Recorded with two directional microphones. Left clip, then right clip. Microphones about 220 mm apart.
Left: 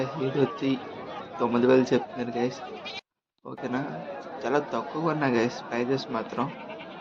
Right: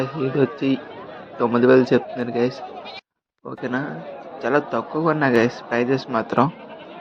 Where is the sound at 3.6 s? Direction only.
15° right (ahead or behind).